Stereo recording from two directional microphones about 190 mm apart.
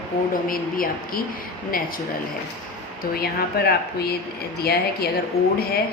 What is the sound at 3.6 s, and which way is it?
A woman's voice, 60° left (ahead or behind).